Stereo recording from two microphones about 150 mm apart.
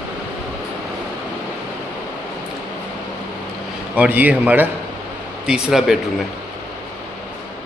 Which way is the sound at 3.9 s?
10° right (ahead or behind).